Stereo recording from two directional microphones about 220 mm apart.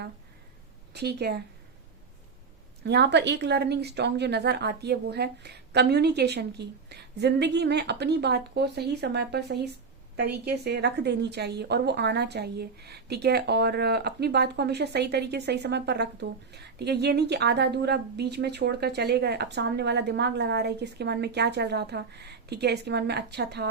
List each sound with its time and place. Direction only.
0.9 s a woman's voice: 50° right (ahead or behind)
2.8 s a woman's voice: 50° right (ahead or behind)